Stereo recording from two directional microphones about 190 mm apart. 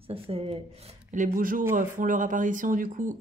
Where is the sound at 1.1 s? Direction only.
45° right (ahead or behind).